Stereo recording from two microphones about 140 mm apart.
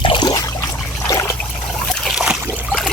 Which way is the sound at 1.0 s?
20° left (ahead or behind).